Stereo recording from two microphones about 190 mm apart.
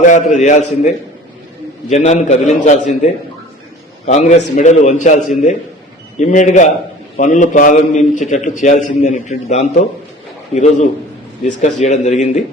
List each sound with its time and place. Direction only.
0.1 s a man's voice: 40° left (ahead or behind)
1.9 s a man's voice: 35° left (ahead or behind)